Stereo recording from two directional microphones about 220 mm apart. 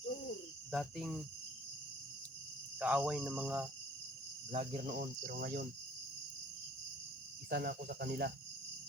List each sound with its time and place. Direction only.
0.7 s speech: centre (ahead or behind)
2.7 s speech: 5° right (ahead or behind)
4.5 s speech: 35° right (ahead or behind)
7.5 s speech: 45° right (ahead or behind)